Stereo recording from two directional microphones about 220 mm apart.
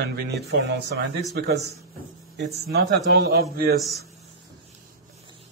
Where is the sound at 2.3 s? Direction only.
50° right (ahead or behind).